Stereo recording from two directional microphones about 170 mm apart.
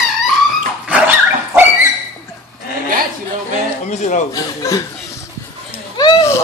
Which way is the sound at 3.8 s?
45° left (ahead or behind).